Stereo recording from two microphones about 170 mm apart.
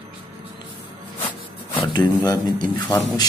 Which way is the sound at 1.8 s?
25° left (ahead or behind).